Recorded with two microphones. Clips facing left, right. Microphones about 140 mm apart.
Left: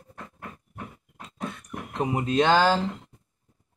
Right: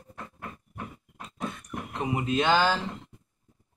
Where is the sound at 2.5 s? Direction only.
35° left (ahead or behind).